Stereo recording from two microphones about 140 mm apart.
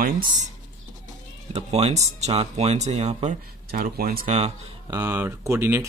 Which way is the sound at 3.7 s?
90° right.